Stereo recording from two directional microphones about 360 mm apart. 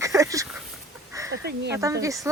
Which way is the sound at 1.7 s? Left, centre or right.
Centre.